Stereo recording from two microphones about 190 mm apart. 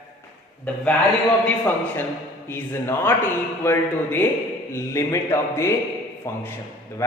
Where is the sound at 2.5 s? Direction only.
10° left (ahead or behind).